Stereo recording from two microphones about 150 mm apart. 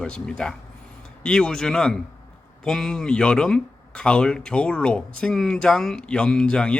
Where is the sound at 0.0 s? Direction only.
5° left (ahead or behind).